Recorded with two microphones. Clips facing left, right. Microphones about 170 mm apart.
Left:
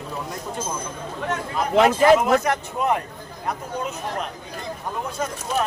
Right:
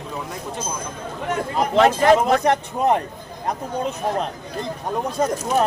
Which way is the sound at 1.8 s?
35° right (ahead or behind).